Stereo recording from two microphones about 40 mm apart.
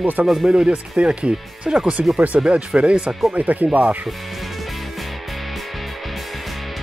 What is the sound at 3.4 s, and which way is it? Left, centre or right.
Speech, right.